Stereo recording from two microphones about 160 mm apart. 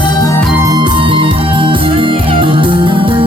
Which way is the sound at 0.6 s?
25° right (ahead or behind).